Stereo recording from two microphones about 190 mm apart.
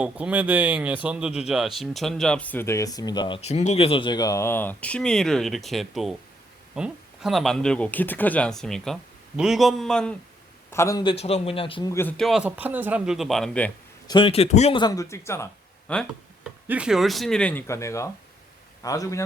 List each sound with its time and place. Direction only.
0.0 s speech: 10° right (ahead or behind)
10.7 s speech: 15° left (ahead or behind)
11.1 s a man's voice: 35° left (ahead or behind)
11.9 s speech: 10° left (ahead or behind)
14.1 s a man's voice: 30° left (ahead or behind)
14.8 s speech: 20° left (ahead or behind)
16.6 s a man's voice: 5° right (ahead or behind); by 19.2 s 15° left (ahead or behind)